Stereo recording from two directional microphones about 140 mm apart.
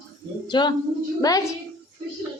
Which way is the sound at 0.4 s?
30° left (ahead or behind).